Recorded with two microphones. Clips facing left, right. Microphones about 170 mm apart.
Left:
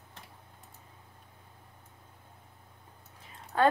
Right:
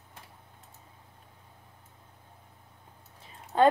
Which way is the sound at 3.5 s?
25° right (ahead or behind).